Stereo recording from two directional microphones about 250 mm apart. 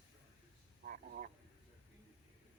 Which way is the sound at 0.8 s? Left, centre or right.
Right.